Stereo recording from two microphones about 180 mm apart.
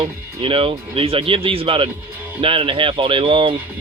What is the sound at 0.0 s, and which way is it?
Speech, 30° right (ahead or behind).